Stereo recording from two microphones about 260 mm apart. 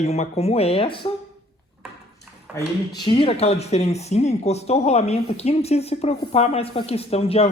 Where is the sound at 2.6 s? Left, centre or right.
Centre.